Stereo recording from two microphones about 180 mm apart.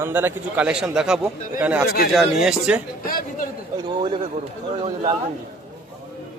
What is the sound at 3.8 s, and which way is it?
Speech, 25° right (ahead or behind).